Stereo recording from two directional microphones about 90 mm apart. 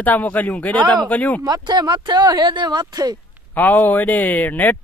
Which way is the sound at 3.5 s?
20° left (ahead or behind).